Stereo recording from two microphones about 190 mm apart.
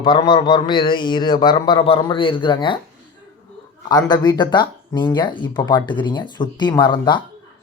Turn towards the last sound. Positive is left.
turn(degrees=25)  # may be behind; listen again after turning